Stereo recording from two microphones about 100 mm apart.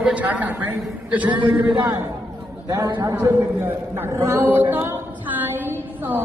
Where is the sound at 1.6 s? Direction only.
45° right (ahead or behind).